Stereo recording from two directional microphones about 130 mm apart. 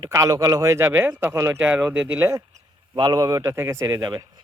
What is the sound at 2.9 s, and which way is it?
Speech, 30° right (ahead or behind).